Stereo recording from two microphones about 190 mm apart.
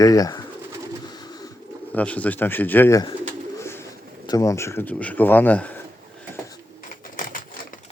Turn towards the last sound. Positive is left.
turn(degrees=45)  # may be behind; listen again after turning